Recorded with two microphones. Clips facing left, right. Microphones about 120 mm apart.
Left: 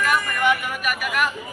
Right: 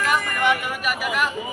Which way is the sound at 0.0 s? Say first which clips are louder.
Even; 25° right (ahead or behind).